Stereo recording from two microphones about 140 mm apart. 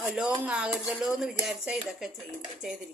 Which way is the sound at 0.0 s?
5° right (ahead or behind).